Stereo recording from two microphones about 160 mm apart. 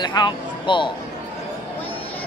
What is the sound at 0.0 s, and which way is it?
Speech, 25° left (ahead or behind).